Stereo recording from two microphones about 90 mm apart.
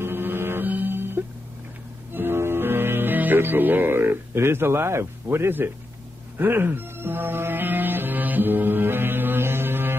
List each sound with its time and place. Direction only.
0.0 s music: 25° right (ahead or behind)